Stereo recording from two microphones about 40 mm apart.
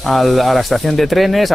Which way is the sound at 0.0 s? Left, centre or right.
Centre.